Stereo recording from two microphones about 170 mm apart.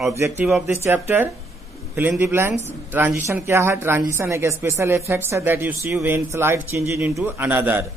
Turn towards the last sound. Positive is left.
turn(degrees=-10)  # may be behind; listen again after turning